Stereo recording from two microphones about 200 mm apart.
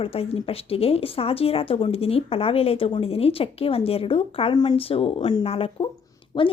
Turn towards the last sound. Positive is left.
turn(degrees=25)  # may be behind; listen again after turning